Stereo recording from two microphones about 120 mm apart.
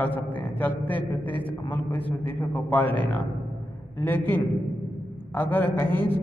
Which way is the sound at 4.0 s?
15° left (ahead or behind).